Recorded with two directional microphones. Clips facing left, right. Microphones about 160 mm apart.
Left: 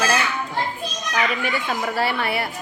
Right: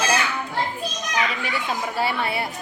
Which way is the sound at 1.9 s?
65° left (ahead or behind).